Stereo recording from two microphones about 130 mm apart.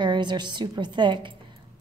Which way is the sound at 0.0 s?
35° right (ahead or behind).